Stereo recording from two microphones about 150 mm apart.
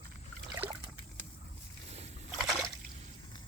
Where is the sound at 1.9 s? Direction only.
40° right (ahead or behind).